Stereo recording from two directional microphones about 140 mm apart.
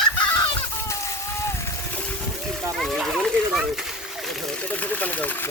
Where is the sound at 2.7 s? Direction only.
Centre (ahead or behind).